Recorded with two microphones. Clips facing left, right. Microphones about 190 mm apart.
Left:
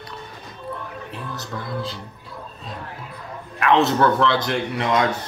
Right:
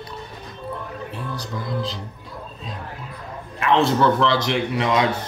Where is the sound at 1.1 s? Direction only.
Centre (ahead or behind).